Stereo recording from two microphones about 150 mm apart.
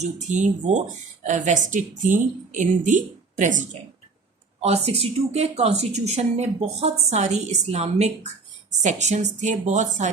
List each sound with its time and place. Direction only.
0.0 s a woman's voice: 55° right (ahead or behind)
4.6 s a woman's voice: 45° right (ahead or behind)